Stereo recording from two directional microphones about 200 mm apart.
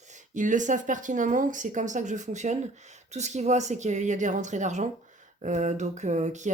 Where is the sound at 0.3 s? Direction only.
40° right (ahead or behind).